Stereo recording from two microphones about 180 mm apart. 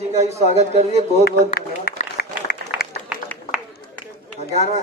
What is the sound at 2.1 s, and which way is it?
Applause, 55° left (ahead or behind).